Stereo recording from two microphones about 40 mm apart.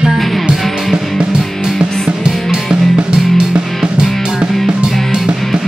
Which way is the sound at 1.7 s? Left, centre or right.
Centre.